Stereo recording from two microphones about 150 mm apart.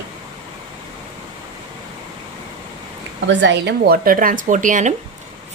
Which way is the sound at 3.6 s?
80° right.